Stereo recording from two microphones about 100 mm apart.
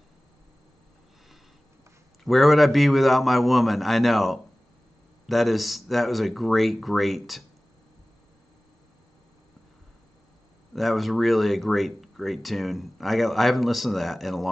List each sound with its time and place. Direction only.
2.2 s speech: centre (ahead or behind)
10.7 s speech: centre (ahead or behind)